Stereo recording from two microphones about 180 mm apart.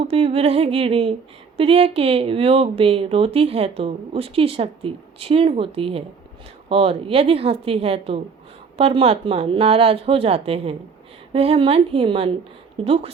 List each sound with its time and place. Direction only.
0.1 s speech: 35° right (ahead or behind)